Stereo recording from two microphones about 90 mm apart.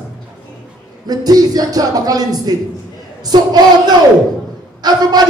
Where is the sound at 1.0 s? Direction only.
45° right (ahead or behind).